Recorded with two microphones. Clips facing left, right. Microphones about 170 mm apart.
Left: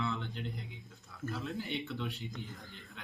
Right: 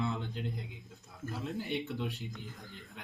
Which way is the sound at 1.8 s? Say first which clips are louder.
Right 2 dB; 40° right (ahead or behind).